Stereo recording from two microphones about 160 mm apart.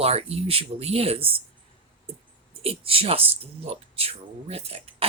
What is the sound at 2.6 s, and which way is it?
Speech, 35° right (ahead or behind).